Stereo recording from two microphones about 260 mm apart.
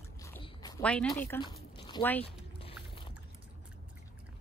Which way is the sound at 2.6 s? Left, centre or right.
Centre.